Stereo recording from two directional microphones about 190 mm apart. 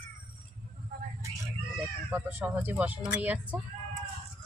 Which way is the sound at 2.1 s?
10° right (ahead or behind).